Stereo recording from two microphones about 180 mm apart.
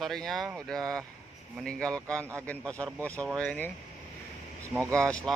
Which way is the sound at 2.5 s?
5° left (ahead or behind).